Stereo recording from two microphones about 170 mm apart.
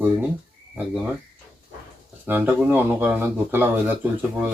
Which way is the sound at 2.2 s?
10° right (ahead or behind).